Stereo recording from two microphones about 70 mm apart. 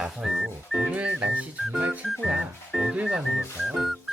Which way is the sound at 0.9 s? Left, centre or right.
Centre.